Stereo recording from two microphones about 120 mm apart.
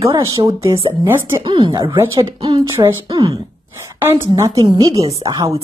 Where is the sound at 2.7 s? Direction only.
35° right (ahead or behind).